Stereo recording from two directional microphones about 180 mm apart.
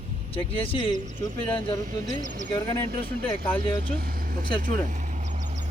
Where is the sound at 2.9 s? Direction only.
55° right (ahead or behind).